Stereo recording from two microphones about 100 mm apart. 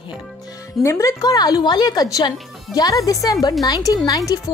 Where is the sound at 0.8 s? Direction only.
30° left (ahead or behind).